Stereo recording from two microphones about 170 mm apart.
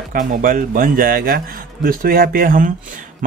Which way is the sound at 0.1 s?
55° right (ahead or behind).